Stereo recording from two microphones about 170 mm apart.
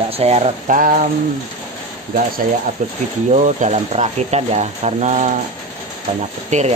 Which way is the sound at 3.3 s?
40° right (ahead or behind).